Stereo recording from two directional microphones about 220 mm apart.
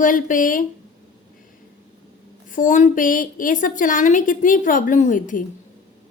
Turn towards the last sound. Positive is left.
turn(degrees=35)  # may be behind; listen again after turning